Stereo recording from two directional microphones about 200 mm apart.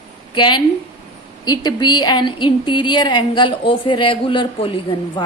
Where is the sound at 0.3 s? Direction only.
20° left (ahead or behind).